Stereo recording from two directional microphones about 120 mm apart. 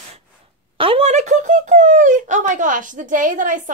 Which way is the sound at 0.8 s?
50° right (ahead or behind).